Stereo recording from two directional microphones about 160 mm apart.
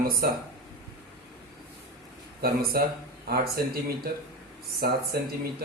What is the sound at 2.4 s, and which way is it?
Speech, 70° right (ahead or behind).